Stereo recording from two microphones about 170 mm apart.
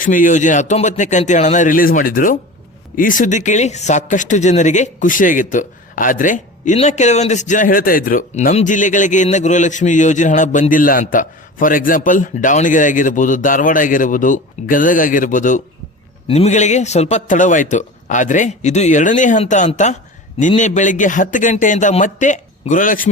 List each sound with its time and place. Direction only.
0.0 s a man's voice: 50° left (ahead or behind)
16.2 s a man's voice: 35° left (ahead or behind); by 23.0 s 55° left (ahead or behind)